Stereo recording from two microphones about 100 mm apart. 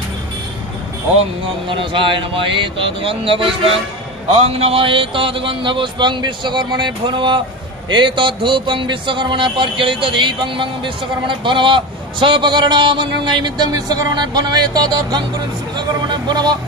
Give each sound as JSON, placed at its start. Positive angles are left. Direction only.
{"t": 1.7, "sound": "speech", "side_deg": -55}
{"t": 4.3, "sound": "speech", "side_deg": -90}
{"t": 13.7, "sound": "speech", "side_deg": -40}